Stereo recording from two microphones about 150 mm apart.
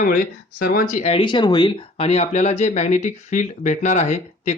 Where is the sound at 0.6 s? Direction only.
90° left.